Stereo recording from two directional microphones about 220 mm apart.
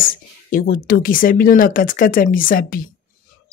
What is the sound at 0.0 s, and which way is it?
Speech, 40° left (ahead or behind).